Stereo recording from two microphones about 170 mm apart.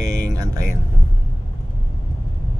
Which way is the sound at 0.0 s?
20° right (ahead or behind).